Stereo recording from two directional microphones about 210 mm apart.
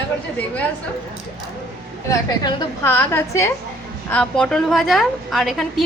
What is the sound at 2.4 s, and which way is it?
A woman's voice, 15° left (ahead or behind).